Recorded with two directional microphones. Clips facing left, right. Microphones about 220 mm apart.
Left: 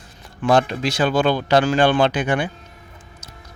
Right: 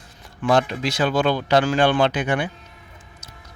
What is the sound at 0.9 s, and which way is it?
Speech, 30° left (ahead or behind).